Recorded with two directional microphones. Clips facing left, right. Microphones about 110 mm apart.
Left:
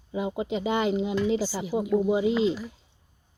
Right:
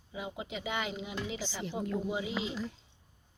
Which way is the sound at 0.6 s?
30° left (ahead or behind).